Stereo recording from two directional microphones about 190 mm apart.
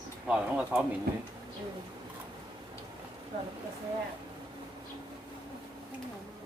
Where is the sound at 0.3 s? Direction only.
5° right (ahead or behind).